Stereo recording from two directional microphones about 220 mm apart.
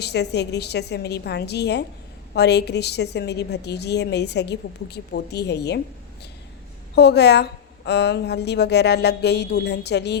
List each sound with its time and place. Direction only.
0.0 s a woman's voice: 50° left (ahead or behind)
6.9 s a woman's voice: 50° left (ahead or behind)